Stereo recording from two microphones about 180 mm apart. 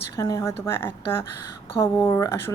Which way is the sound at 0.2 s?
20° left (ahead or behind).